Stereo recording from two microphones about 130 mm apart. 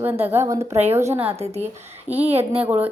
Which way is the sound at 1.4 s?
55° right (ahead or behind).